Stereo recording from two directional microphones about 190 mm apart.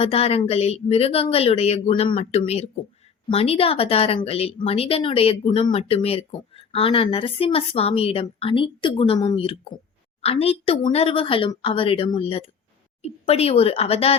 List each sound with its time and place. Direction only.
0.0 s speech: 30° left (ahead or behind)